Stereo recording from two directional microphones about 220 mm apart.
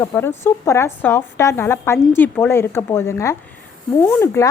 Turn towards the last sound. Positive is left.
turn(degrees=10)  # may be behind; listen again after turning